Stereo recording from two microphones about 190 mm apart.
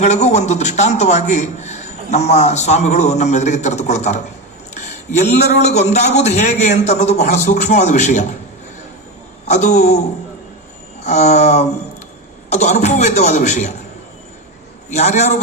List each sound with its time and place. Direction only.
0.0 s a man's voice: 35° left (ahead or behind)
9.5 s a man's voice: 40° left (ahead or behind)
11.0 s a man's voice: 35° left (ahead or behind)
14.8 s a man's voice: 40° left (ahead or behind)